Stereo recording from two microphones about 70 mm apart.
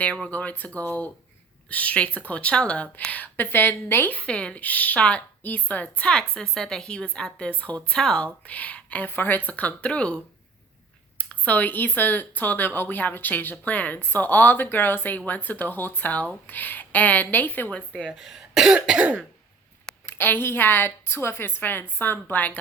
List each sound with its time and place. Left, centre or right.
0.0 s speech: centre
4.3 s speech: centre
11.2 s speech: centre
17.7 s speech: centre
18.0 s speech: centre
20.1 s a woman's voice: left